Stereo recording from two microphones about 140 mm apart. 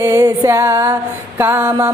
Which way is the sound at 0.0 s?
20° right (ahead or behind).